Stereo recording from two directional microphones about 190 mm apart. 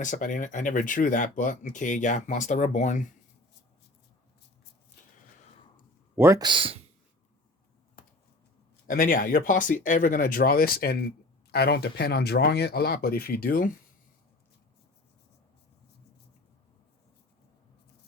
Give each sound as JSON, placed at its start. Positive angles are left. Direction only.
{"t": 0.0, "sound": "speech", "side_deg": 40}
{"t": 6.1, "sound": "speech", "side_deg": -15}
{"t": 8.9, "sound": "speech", "side_deg": 45}